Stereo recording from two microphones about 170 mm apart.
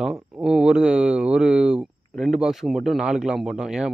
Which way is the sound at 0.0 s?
5° right (ahead or behind).